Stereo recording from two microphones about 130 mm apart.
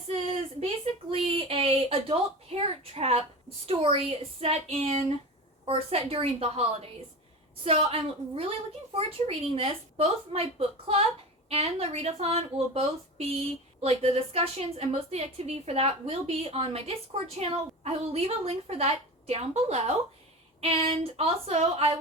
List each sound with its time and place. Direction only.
0.1 s a sound: 50° right (ahead or behind)
1.1 s a woman's voice: 45° right (ahead or behind)
20.6 s a woman's voice: 45° right (ahead or behind)